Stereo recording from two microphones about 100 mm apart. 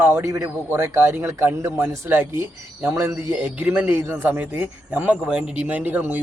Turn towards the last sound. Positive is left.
turn(degrees=-20)  # may be behind; listen again after turning